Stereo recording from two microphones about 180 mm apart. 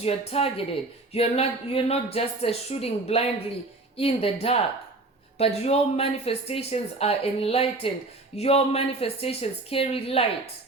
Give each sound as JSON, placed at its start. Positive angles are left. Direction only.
{"t": 0.0, "sound": "speech", "side_deg": 35}